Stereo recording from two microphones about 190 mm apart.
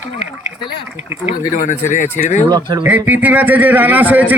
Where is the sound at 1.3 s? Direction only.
45° left (ahead or behind).